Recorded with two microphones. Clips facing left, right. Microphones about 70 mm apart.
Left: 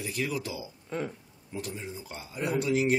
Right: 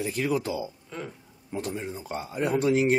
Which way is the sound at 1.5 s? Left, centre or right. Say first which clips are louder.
Right 5 dB; right.